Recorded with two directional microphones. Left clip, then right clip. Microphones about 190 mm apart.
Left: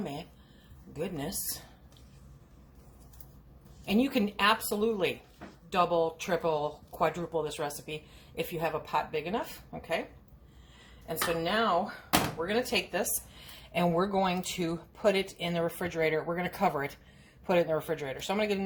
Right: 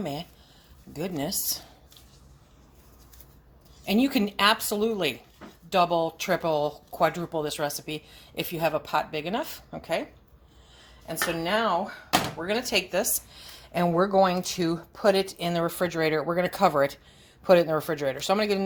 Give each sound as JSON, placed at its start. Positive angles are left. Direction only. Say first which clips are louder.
{"t": 0.0, "sound": "speech", "louder": "right 6 dB", "side_deg": -50}
{"t": 3.8, "sound": "speech", "louder": "right 4 dB", "side_deg": -55}
{"t": 11.0, "sound": "speech", "louder": "right 2 dB", "side_deg": -45}